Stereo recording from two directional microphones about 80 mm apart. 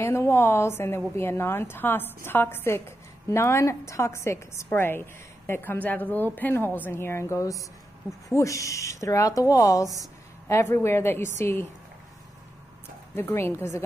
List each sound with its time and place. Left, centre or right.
0.0 s a woman's voice: left
10.5 s speech: left
13.1 s speech: left